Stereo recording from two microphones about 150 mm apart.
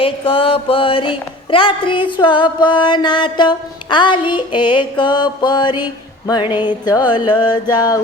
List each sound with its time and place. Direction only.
0.0 s music: 35° left (ahead or behind)